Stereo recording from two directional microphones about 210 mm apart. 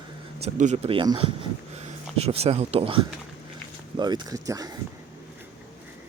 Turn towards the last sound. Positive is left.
turn(degrees=-15)  # may be behind; listen again after turning